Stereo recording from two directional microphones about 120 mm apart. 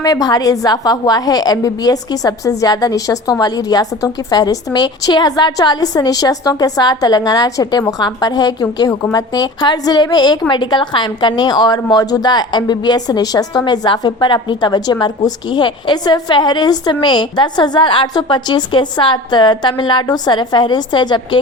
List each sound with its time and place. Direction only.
0.0 s a woman's voice: 30° left (ahead or behind)